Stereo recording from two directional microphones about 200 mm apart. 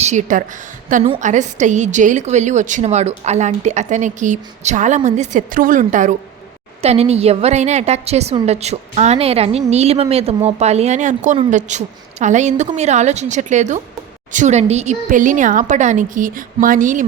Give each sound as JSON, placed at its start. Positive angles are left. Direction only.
{"t": 0.0, "sound": "a woman's voice", "side_deg": -35}